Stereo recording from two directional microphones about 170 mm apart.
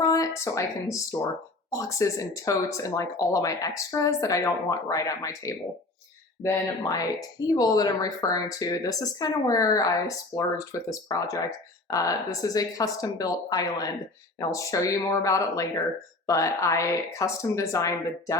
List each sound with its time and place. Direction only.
0.0 s speech: 20° left (ahead or behind)